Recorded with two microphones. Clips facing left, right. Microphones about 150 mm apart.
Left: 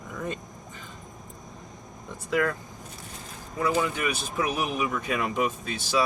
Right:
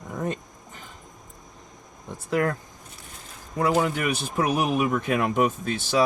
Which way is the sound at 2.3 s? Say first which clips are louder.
Right 2 dB; 45° right (ahead or behind).